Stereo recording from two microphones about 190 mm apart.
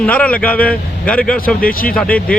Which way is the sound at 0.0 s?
5° left (ahead or behind).